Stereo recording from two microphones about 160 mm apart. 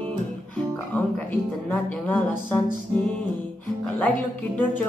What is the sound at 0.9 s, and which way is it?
Speech, 10° left (ahead or behind).